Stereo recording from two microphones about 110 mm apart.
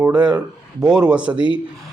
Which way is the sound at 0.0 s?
10° right (ahead or behind).